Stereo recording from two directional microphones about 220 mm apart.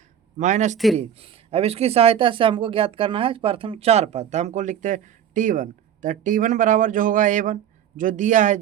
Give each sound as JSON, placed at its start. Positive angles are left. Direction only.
{"t": 0.3, "sound": "speech", "side_deg": -35}